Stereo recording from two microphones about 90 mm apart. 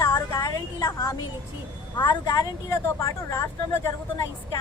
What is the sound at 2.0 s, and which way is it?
Speech, 55° left (ahead or behind).